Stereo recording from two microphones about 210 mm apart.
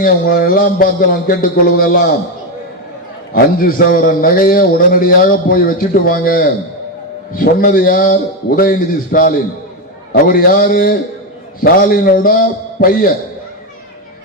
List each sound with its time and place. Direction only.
0.0 s a man's voice: 45° left (ahead or behind)
3.3 s a man's voice: 45° left (ahead or behind)